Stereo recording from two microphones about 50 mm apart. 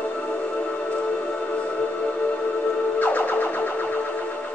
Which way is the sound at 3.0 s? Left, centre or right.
Left.